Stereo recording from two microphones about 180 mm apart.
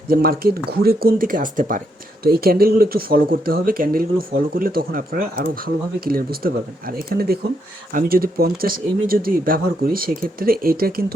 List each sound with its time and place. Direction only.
0.1 s speech: 55° right (ahead or behind)